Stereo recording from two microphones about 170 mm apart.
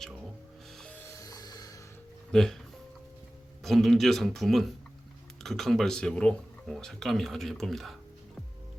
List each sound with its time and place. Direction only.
0.8 s music: 10° left (ahead or behind)
2.3 s speech: 5° left (ahead or behind)
3.6 s speech: centre (ahead or behind)